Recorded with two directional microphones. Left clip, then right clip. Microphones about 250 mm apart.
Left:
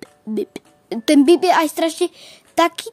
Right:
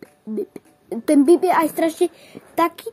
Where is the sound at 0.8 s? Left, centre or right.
Left.